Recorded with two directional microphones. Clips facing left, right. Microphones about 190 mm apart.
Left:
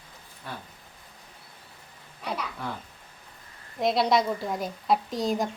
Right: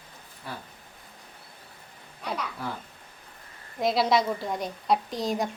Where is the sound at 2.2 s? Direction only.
Centre (ahead or behind).